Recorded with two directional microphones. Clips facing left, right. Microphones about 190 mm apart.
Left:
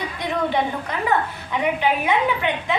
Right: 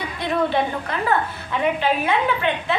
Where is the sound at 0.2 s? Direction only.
15° left (ahead or behind).